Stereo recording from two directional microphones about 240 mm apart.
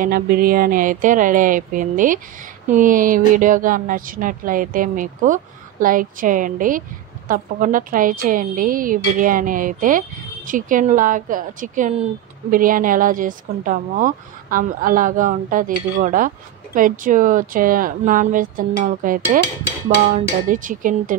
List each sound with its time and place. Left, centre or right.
0.0 s a woman's voice: right